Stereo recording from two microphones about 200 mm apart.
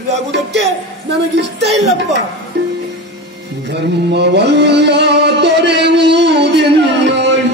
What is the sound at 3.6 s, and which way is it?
Music, 55° right (ahead or behind).